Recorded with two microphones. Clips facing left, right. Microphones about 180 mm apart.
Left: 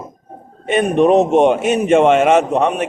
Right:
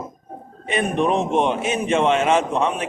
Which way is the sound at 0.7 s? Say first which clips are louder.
Left 8 dB; 45° left (ahead or behind).